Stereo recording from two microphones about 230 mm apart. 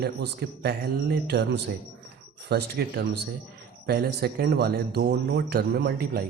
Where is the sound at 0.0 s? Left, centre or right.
Right.